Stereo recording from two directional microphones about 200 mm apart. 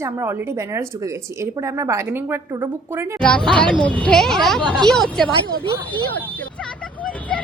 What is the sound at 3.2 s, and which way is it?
Speech, 5° left (ahead or behind).